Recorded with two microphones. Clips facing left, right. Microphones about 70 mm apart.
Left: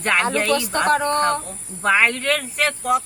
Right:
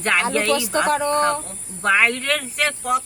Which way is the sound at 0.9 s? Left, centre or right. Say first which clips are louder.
Left 3 dB; left.